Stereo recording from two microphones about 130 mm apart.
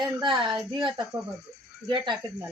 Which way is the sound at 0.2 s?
35° right (ahead or behind).